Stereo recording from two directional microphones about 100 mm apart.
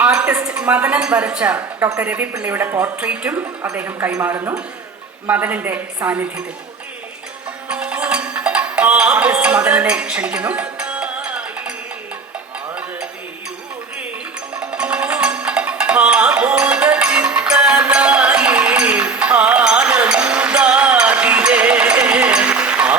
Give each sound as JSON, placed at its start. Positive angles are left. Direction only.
{"t": 0.0, "sound": "a woman's voice", "side_deg": -10}
{"t": 7.7, "sound": "music", "side_deg": -10}
{"t": 14.6, "sound": "music", "side_deg": -10}